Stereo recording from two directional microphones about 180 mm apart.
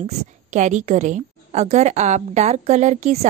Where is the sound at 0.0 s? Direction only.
40° right (ahead or behind).